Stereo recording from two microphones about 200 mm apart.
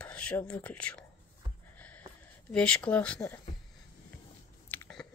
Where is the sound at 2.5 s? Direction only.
5° left (ahead or behind).